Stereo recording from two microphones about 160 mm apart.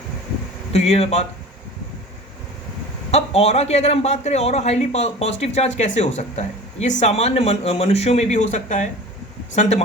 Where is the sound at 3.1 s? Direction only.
40° left (ahead or behind).